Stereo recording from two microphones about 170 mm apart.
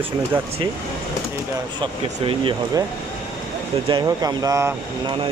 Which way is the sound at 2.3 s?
30° right (ahead or behind).